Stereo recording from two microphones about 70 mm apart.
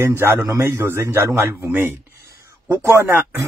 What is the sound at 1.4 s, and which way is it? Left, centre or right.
Speech, right.